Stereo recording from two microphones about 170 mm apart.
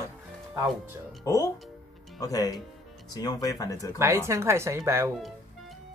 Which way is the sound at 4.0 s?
15° right (ahead or behind).